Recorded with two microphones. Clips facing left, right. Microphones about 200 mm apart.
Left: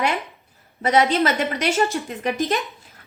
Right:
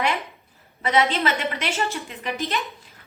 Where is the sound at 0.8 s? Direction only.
45° left (ahead or behind).